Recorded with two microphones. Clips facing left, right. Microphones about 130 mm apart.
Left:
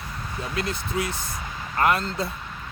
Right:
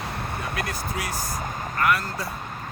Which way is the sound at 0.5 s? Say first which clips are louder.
Left 6 dB; 25° left (ahead or behind).